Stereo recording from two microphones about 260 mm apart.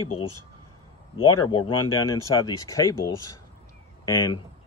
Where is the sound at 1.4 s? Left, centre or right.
Centre.